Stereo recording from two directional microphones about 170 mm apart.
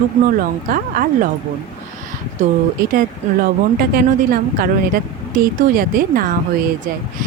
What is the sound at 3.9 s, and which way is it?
A woman's voice, 60° right (ahead or behind).